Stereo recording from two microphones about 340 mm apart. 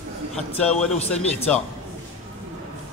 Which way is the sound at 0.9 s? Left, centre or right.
Centre.